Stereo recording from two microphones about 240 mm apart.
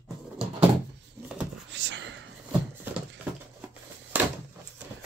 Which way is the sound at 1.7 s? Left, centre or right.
Right.